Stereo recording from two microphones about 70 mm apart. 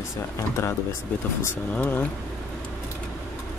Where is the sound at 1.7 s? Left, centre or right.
Left.